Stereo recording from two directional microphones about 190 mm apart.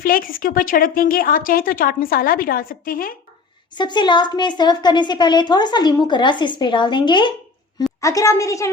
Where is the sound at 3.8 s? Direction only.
25° left (ahead or behind).